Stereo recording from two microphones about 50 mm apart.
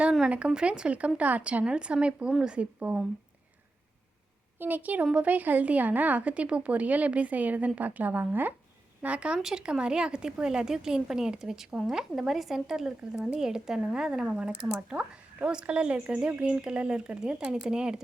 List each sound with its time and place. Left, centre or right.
0.3 s speech: right
4.6 s a woman's voice: right
9.0 s a woman's voice: right